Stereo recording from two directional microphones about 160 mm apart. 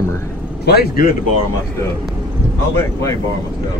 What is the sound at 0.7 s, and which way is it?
Speech, 70° left (ahead or behind).